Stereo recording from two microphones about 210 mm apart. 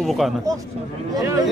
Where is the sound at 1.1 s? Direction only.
15° right (ahead or behind).